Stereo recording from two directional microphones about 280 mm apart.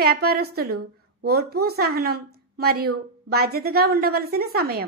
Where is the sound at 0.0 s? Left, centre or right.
Right.